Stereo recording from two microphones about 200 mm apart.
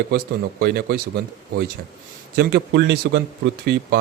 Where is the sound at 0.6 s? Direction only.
50° right (ahead or behind).